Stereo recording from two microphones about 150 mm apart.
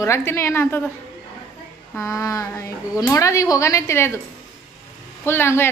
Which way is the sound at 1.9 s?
20° left (ahead or behind).